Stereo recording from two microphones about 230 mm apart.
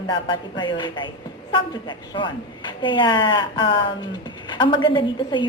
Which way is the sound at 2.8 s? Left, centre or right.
Left.